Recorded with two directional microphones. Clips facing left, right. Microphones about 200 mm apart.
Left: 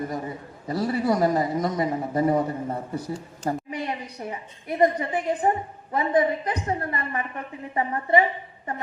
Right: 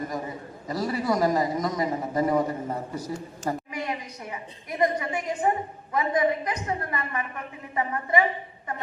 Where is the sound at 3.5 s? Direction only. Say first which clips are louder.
Left 2 dB; 35° left (ahead or behind).